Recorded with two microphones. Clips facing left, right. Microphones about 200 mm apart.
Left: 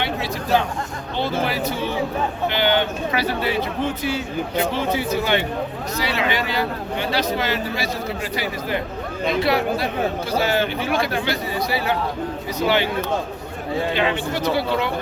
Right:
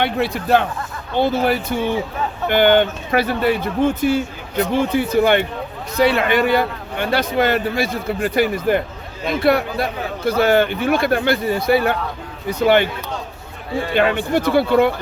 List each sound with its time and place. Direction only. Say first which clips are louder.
0.0 s a man's voice: right 5 dB; 55° right (ahead or behind)
13.9 s a man's voice: right 5 dB; 50° right (ahead or behind)